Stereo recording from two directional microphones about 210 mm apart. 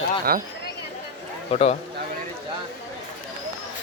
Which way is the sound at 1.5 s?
30° left (ahead or behind).